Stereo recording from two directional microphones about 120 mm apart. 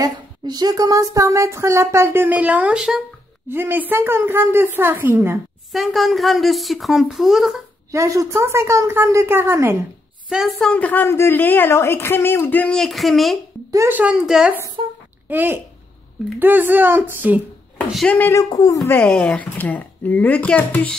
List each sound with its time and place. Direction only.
0.0 s speech: 35° right (ahead or behind); by 3.0 s 5° right (ahead or behind)
3.4 s a woman's voice: 20° right (ahead or behind)
5.7 s speech: centre (ahead or behind)
7.9 s speech: 25° right (ahead or behind)
10.6 s a woman's voice: 10° left (ahead or behind)
13.7 s speech: 25° right (ahead or behind)
13.9 s a woman's voice: 10° right (ahead or behind)
15.2 s a woman's voice: 15° right (ahead or behind)
17.9 s a woman's voice: 10° left (ahead or behind)
18.3 s speech: 30° left (ahead or behind)
18.9 s a woman's voice: 10° left (ahead or behind)